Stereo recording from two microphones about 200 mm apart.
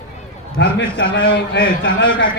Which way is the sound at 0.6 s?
65° left (ahead or behind).